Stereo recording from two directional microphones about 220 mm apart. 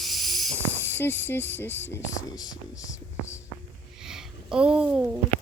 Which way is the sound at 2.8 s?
15° left (ahead or behind).